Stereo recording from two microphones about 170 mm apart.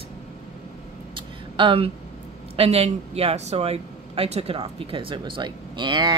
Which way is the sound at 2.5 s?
35° right (ahead or behind).